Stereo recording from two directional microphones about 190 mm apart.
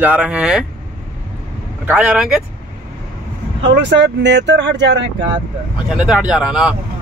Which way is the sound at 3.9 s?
65° right (ahead or behind).